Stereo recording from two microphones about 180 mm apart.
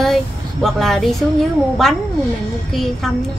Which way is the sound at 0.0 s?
Centre (ahead or behind).